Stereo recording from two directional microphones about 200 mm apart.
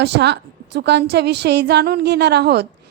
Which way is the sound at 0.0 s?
60° right (ahead or behind).